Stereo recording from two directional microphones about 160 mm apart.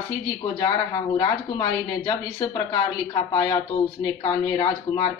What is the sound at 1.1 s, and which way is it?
A woman's voice, 25° left (ahead or behind).